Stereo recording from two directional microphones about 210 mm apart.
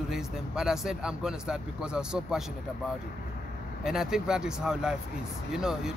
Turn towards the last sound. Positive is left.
turn(degrees=0)  # may be behind; listen again after turning